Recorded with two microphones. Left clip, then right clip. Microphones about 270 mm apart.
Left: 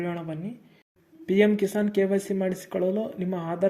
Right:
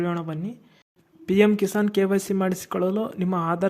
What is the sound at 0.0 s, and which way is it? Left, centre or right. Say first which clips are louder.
Speech: right 4 dB; right.